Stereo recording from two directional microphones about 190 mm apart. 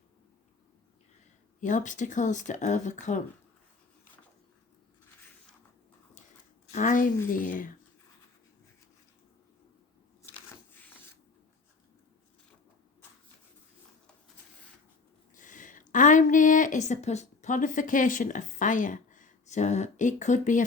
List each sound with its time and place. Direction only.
1.6 s speech: 40° left (ahead or behind)
6.7 s a woman's voice: 40° left (ahead or behind)
15.4 s a woman's voice: 40° left (ahead or behind)